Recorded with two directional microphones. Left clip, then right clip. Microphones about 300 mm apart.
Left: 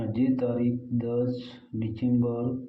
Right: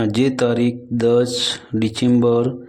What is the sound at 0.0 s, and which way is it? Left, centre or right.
Speech, right.